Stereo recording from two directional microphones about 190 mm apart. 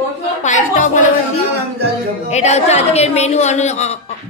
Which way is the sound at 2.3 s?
35° left (ahead or behind).